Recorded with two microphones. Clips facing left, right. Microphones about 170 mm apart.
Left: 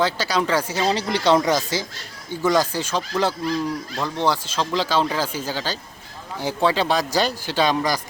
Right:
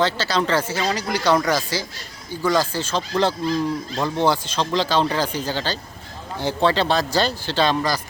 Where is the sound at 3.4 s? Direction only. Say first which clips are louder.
Right 2 dB; 25° right (ahead or behind).